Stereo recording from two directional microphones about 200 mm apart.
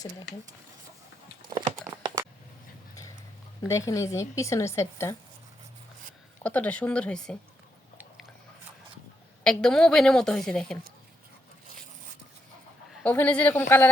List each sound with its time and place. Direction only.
1.5 s a sound: 20° right (ahead or behind)
3.7 s speech: 15° left (ahead or behind)
6.4 s speech: 5° left (ahead or behind)
9.4 s a woman's voice: 5° left (ahead or behind)
13.0 s speech: 5° left (ahead or behind)